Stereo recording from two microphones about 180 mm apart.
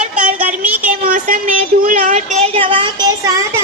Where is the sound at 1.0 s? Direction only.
50° right (ahead or behind); by 3.2 s 25° right (ahead or behind).